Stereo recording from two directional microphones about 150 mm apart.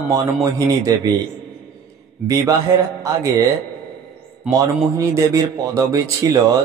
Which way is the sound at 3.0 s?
20° right (ahead or behind).